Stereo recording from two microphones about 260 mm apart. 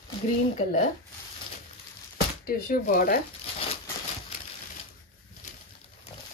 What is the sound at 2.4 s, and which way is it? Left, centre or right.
Speech, left.